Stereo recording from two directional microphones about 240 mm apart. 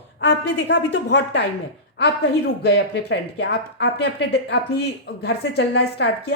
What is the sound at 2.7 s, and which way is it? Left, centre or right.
A woman's voice, left.